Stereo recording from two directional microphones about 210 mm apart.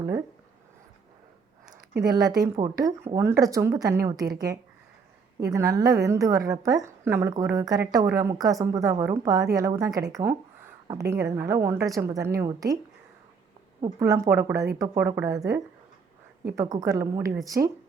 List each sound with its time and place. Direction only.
2.0 s a woman's voice: 20° right (ahead or behind)
13.8 s a woman's voice: 15° right (ahead or behind)